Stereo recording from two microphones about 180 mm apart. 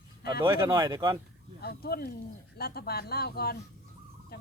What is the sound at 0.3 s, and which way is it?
Speech, 20° right (ahead or behind).